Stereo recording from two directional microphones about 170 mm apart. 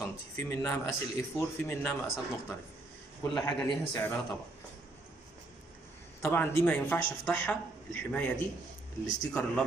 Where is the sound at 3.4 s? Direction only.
20° left (ahead or behind).